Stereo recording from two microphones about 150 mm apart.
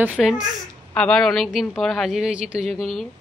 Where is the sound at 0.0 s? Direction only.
5° right (ahead or behind).